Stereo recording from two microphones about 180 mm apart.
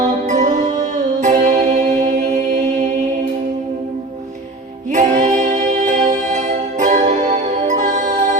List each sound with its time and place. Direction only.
0.0 s music: 40° right (ahead or behind)
5.2 s music: 45° right (ahead or behind)